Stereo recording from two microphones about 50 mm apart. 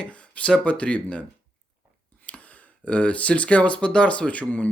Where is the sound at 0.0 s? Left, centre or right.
Left.